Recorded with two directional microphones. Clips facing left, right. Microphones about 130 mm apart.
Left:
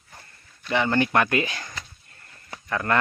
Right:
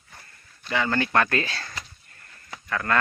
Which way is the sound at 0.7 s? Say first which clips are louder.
Left 3 dB; 20° left (ahead or behind).